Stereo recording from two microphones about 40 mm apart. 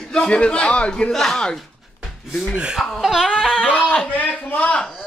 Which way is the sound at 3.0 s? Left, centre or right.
Centre.